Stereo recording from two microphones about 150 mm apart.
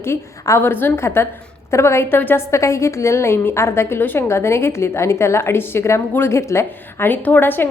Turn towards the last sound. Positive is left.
turn(degrees=10)  # may be behind; listen again after turning